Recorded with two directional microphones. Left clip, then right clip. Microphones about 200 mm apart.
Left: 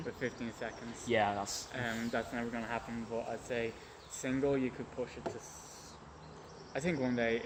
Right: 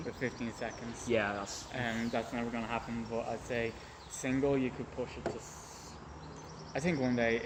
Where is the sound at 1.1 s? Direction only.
45° left (ahead or behind).